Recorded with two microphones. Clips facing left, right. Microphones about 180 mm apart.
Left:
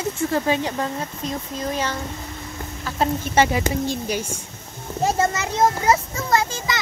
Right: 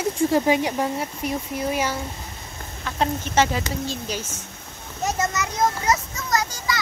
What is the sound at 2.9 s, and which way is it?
Speech, 5° left (ahead or behind).